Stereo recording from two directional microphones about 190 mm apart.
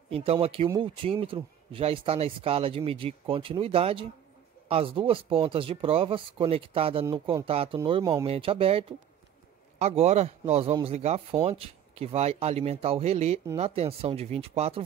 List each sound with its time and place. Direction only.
0.1 s speech: 30° right (ahead or behind)